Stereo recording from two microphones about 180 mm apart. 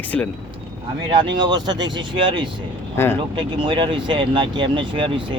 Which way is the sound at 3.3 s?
25° right (ahead or behind).